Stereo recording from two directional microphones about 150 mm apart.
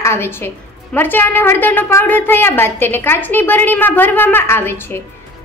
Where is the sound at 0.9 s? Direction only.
15° left (ahead or behind).